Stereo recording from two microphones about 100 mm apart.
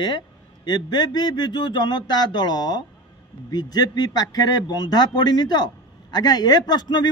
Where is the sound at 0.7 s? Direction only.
45° left (ahead or behind).